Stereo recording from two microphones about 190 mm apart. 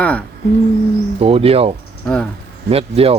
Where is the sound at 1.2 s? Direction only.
30° right (ahead or behind).